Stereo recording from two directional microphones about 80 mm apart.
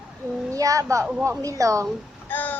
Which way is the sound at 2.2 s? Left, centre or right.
Left.